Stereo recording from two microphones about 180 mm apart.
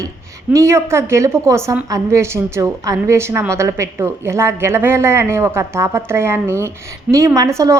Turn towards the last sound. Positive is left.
turn(degrees=-15)  # may be behind; listen again after turning